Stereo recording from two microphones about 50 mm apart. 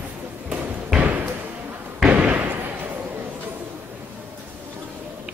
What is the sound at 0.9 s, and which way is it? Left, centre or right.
Basketball bounce, right.